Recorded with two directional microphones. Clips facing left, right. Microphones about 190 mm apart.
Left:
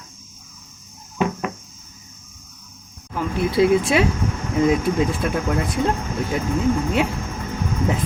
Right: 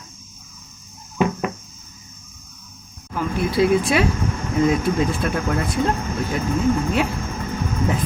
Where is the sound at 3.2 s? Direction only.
20° left (ahead or behind).